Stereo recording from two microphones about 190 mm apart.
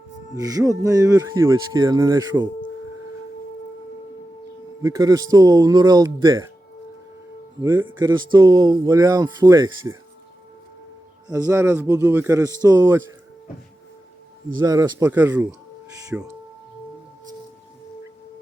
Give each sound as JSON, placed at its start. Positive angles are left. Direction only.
{"t": 0.3, "sound": "speech", "side_deg": -20}
{"t": 4.8, "sound": "speech", "side_deg": -20}
{"t": 7.6, "sound": "speech", "side_deg": -20}
{"t": 11.3, "sound": "speech", "side_deg": -20}
{"t": 14.6, "sound": "speech", "side_deg": -20}